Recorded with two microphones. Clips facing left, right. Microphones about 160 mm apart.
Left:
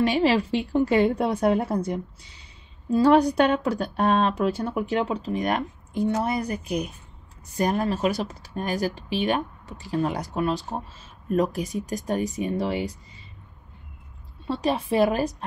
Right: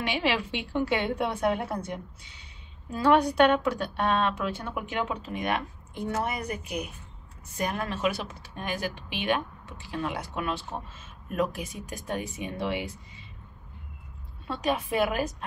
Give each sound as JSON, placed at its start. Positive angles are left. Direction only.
{"t": 0.0, "sound": "speech", "side_deg": 40}
{"t": 2.9, "sound": "speech", "side_deg": 35}
{"t": 14.5, "sound": "speech", "side_deg": 30}